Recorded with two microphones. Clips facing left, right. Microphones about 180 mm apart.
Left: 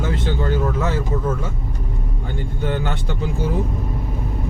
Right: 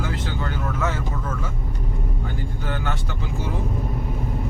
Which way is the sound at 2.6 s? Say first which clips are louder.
Left 7 dB; 25° left (ahead or behind).